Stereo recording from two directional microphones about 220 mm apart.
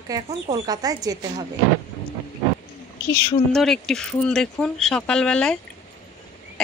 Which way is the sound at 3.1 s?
Centre (ahead or behind).